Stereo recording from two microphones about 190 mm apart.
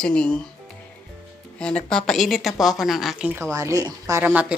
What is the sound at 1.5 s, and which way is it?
A woman's voice, 5° left (ahead or behind).